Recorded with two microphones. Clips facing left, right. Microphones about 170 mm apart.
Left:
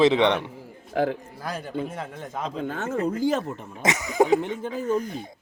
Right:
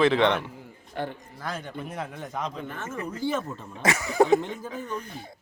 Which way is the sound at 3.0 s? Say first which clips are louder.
Left 4 dB; 25° left (ahead or behind).